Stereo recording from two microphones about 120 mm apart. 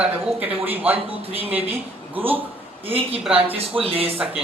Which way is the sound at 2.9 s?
50° right (ahead or behind).